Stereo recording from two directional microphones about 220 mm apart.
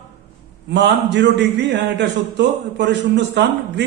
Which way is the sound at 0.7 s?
55° right (ahead or behind).